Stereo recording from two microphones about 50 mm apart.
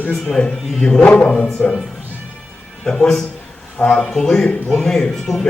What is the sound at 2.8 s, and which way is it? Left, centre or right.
Speech, centre.